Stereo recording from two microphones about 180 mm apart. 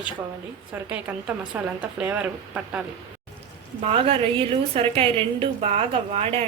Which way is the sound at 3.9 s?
35° right (ahead or behind).